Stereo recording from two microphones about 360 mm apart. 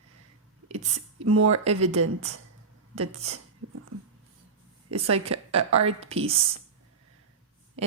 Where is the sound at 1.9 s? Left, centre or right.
Right.